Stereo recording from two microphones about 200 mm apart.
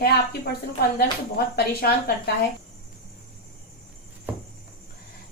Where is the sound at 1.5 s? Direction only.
55° left (ahead or behind).